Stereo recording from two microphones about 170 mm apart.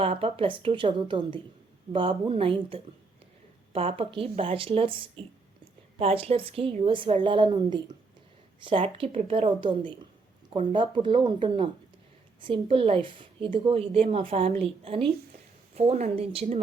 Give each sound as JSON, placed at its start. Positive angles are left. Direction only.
{"t": 0.0, "sound": "a woman's voice", "side_deg": -35}